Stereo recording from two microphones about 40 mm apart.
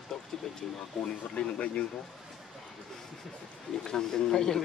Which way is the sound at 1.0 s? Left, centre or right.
Centre.